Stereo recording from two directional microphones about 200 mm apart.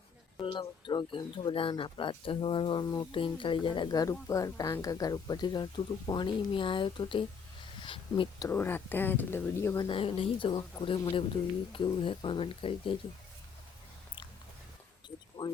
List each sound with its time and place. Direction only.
0.3 s speech: 20° left (ahead or behind)
7.8 s a sound: 25° left (ahead or behind)
8.4 s speech: 10° left (ahead or behind)
15.4 s speech: 20° left (ahead or behind)